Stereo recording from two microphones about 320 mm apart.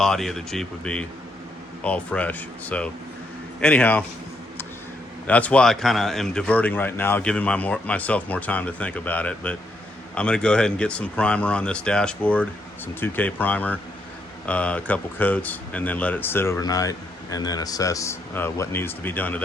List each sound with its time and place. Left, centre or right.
0.0 s a man's voice: centre
5.2 s a man's voice: centre